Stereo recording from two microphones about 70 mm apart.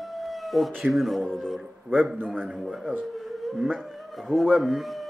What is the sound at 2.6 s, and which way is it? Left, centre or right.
Speech, centre.